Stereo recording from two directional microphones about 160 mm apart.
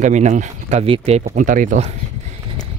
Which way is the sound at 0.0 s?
45° right (ahead or behind).